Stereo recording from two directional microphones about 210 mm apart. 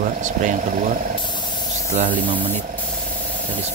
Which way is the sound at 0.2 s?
35° right (ahead or behind).